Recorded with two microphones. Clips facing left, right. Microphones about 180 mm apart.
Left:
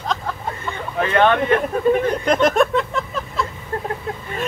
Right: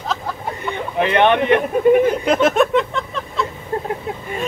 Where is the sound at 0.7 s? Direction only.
20° right (ahead or behind).